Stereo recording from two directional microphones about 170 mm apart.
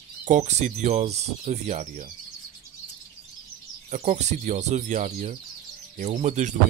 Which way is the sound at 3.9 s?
45° right (ahead or behind).